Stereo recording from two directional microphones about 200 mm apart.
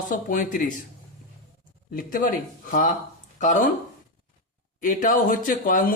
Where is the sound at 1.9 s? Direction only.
45° left (ahead or behind).